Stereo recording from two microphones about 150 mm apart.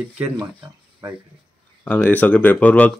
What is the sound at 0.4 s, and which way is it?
Speech, 25° right (ahead or behind).